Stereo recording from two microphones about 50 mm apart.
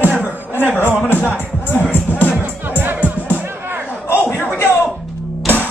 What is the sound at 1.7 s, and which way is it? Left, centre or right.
Music, left.